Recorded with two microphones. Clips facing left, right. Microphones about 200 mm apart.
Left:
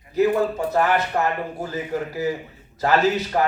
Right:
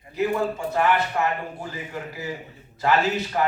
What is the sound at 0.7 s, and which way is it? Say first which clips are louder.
A man's voice: left 1 dB; 40° left (ahead or behind).